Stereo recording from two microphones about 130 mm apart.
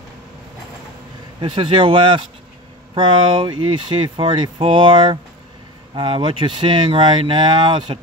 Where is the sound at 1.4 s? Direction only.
40° right (ahead or behind).